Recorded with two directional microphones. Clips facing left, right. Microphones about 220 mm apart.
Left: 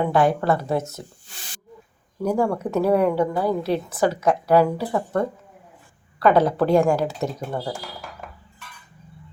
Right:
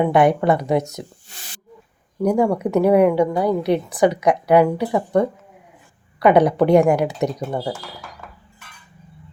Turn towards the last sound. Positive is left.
turn(degrees=-15)  # may be behind; listen again after turning